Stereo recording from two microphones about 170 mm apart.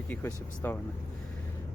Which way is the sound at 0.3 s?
10° left (ahead or behind).